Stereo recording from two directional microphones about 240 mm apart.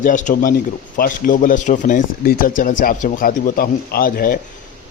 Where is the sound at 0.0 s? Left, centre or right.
Left.